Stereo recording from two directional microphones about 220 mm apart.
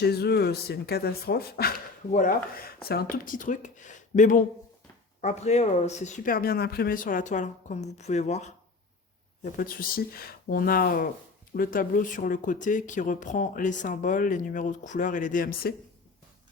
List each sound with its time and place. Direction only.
0.0 s speech: 45° left (ahead or behind)